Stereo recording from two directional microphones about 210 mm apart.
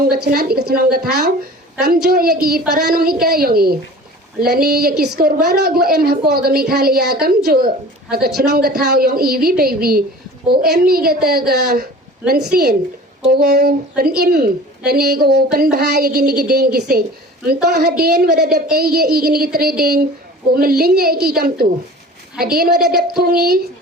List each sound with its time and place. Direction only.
0.3 s speech: 45° right (ahead or behind)
2.0 s speech: 45° right (ahead or behind)